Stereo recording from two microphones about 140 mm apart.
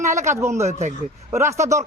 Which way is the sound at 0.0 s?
20° right (ahead or behind).